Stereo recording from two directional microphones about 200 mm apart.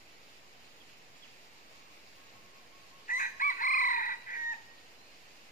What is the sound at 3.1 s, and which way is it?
Chicken, 40° left (ahead or behind).